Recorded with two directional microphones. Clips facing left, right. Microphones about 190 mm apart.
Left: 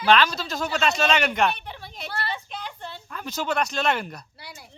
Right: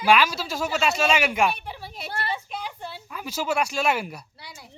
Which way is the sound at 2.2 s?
10° right (ahead or behind).